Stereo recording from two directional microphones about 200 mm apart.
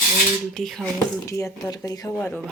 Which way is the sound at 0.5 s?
Centre (ahead or behind).